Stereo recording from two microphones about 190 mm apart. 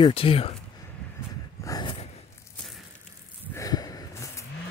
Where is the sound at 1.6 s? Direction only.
20° left (ahead or behind).